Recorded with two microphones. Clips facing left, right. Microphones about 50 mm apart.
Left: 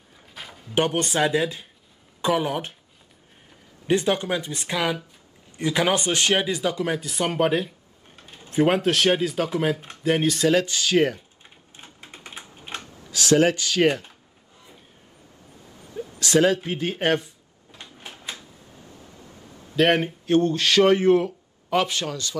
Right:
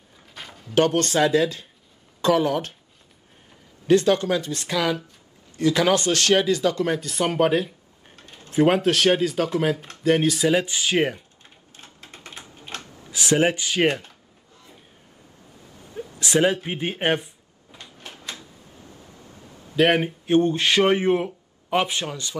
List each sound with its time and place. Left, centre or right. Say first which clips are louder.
0.3 s a sound: even; centre
0.7 s speech: right 3 dB; centre
3.8 s speech: right 4 dB; centre
10.5 s speech: left 1 dB; centre
11.4 s typewriter: left 1 dB; centre
13.1 s speech: left 2 dB; right
16.2 s speech: left 1 dB; right
17.9 s a sound: even; centre
19.8 s speech: right 1 dB; centre
20.2 s a man's voice: right 1 dB; right